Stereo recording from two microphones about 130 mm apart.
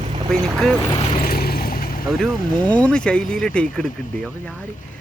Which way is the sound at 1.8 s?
90° left.